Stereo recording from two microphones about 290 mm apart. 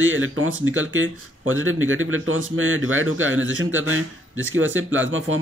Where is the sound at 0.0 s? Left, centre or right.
Right.